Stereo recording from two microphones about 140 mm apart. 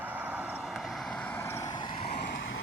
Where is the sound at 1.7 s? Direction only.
35° left (ahead or behind).